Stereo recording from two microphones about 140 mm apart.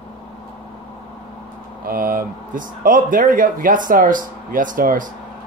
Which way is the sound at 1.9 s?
90° right.